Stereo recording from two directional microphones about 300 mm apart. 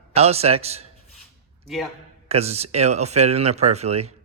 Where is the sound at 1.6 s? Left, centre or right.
Centre.